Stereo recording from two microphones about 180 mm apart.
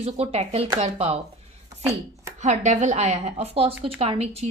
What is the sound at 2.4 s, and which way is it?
A woman's voice, 40° right (ahead or behind).